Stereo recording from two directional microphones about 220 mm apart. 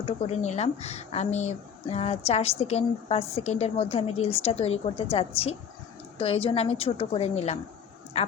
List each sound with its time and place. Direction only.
0.0 s a woman's voice: 30° left (ahead or behind)